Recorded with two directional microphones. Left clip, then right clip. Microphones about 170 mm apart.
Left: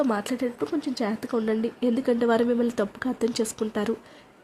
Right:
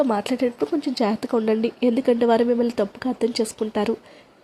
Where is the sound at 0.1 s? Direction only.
15° right (ahead or behind).